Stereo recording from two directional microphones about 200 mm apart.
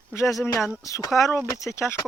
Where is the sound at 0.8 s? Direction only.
15° left (ahead or behind).